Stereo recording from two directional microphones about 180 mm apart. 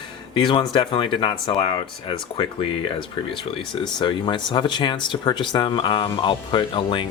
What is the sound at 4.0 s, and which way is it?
Speech, 25° left (ahead or behind).